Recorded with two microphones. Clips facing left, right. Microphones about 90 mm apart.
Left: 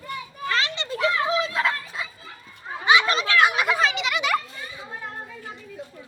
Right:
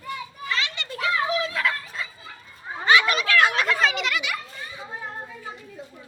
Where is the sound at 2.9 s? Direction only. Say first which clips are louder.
Even; 25° left (ahead or behind); by 4.1 s centre (ahead or behind).